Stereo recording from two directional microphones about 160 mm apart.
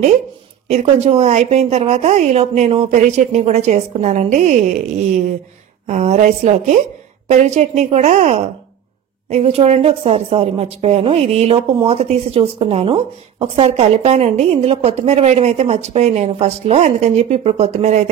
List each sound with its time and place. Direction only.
0.7 s a woman's voice: 45° right (ahead or behind)
5.9 s a woman's voice: 45° right (ahead or behind)